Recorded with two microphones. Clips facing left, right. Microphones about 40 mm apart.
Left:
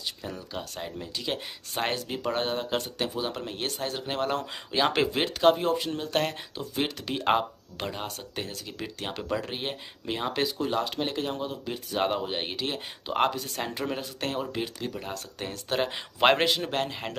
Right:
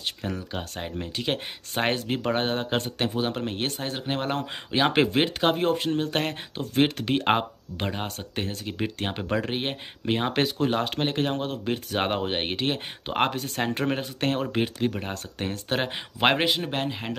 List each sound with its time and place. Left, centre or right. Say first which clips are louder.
0.2 s speech: right 4 dB; right
6.6 s speech: right 7 dB; right
16.2 s a man's voice: even; centre